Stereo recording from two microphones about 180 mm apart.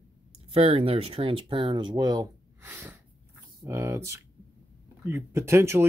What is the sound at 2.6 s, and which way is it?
Speech, 10° right (ahead or behind).